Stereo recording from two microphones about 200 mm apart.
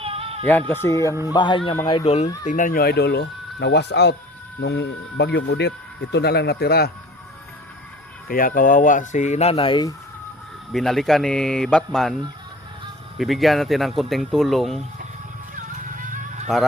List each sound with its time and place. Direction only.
0.0 s music: 30° right (ahead or behind)
0.7 s speech: 15° left (ahead or behind); by 2.3 s 30° left (ahead or behind)
2.5 s speech: 40° left (ahead or behind)
8.3 s speech: 45° left (ahead or behind); by 9.9 s 25° left (ahead or behind)
10.7 s speech: centre (ahead or behind)
13.1 s speech: centre (ahead or behind)
15.5 s music: 40° right (ahead or behind)